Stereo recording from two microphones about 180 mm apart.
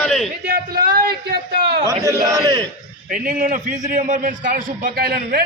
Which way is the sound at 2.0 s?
15° right (ahead or behind).